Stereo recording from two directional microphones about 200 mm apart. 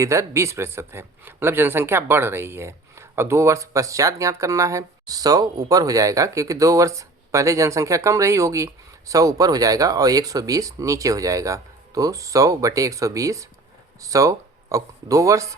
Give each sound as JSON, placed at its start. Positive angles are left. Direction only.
{"t": 0.0, "sound": "speech", "side_deg": -15}